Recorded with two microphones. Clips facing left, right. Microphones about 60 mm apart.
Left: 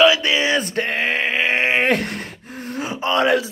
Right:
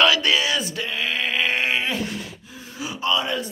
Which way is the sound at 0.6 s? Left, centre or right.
Left.